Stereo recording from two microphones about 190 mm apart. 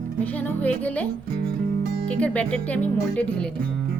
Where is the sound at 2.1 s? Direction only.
5° left (ahead or behind).